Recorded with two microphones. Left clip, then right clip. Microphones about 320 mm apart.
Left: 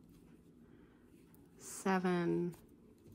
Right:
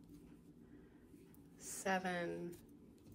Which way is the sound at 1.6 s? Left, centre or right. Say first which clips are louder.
Left 3 dB; centre.